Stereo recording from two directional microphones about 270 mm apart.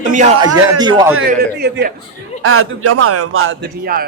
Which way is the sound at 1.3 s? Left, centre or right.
Right.